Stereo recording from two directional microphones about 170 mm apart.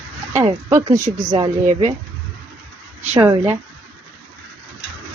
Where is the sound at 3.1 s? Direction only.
15° right (ahead or behind).